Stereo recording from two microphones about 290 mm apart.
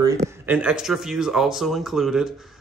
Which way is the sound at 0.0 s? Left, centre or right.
Centre.